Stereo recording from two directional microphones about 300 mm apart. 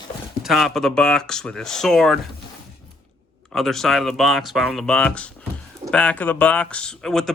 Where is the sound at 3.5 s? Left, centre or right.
Centre.